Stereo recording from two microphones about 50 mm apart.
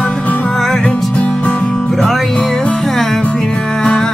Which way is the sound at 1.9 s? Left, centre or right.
Centre.